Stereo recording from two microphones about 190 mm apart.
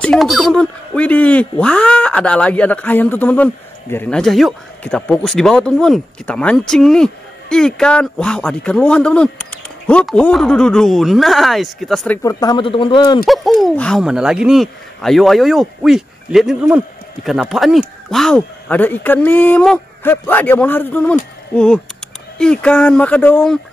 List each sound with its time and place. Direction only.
0.0 s speech: centre (ahead or behind)
12.2 s speech: 20° left (ahead or behind)
13.2 s speech: centre (ahead or behind)